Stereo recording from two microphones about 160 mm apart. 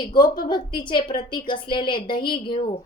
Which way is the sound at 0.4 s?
30° left (ahead or behind).